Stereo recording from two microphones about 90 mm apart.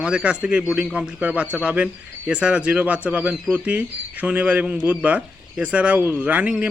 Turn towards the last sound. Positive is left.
turn(degrees=-15)  # may be behind; listen again after turning